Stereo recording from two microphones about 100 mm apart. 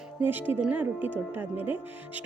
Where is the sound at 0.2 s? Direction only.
20° right (ahead or behind).